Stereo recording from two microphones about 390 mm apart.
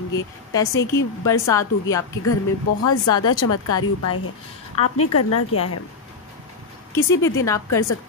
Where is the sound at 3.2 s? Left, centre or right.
Left.